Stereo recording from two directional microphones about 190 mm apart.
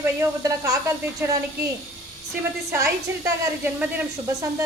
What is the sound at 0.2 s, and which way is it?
A woman's voice, 20° right (ahead or behind).